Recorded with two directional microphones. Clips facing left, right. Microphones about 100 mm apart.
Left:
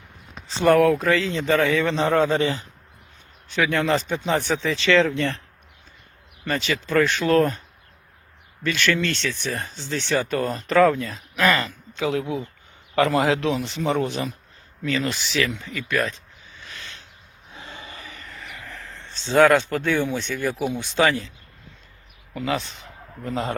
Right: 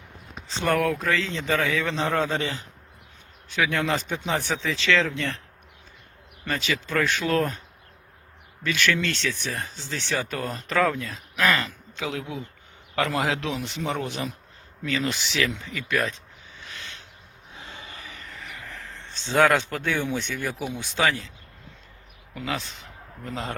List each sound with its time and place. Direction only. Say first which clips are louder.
0.4 s a man's voice: left 7 dB; 5° left (ahead or behind)
6.4 s a man's voice: left 3 dB; 5° right (ahead or behind)
8.6 s a man's voice: left 2 dB; 5° right (ahead or behind)
18.3 s a sound: even; 5° right (ahead or behind)
20.1 s speech: left 1 dB; 15° right (ahead or behind)
20.3 s a man's voice: left 5 dB; centre (ahead or behind)
22.4 s a man's voice: left 5 dB; centre (ahead or behind)